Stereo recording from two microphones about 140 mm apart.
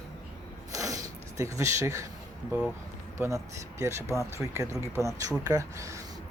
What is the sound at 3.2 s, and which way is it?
Speech, 20° right (ahead or behind).